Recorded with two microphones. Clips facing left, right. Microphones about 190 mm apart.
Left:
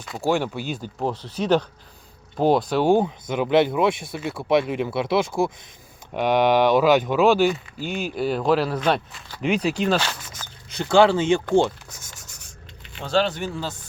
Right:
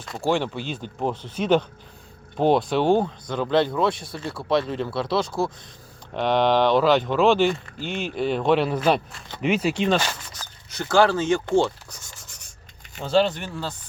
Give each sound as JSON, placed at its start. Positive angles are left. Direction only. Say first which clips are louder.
{"t": 0.0, "sound": "speech", "louder": "left 1 dB", "side_deg": 5}
{"t": 4.1, "sound": "speech", "louder": "left 2 dB", "side_deg": 5}
{"t": 10.8, "sound": "speech", "louder": "left 2 dB", "side_deg": 15}
{"t": 13.0, "sound": "speech", "louder": "right 2 dB", "side_deg": -5}